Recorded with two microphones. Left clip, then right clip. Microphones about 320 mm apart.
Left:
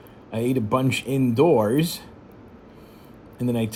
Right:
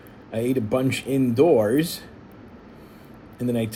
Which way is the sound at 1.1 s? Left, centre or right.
Centre.